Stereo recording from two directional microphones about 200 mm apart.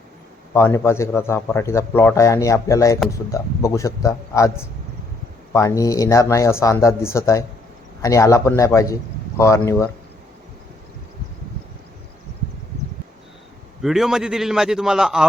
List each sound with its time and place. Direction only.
0.5 s speech: 15° left (ahead or behind)
13.8 s a man's voice: centre (ahead or behind)